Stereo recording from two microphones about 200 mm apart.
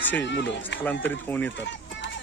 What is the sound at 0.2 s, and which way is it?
Speech, 60° left (ahead or behind).